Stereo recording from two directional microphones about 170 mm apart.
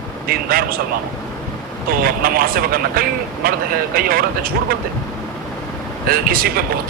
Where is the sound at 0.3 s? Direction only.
60° right (ahead or behind).